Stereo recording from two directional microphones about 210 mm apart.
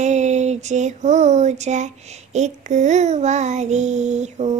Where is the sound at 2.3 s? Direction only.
35° right (ahead or behind).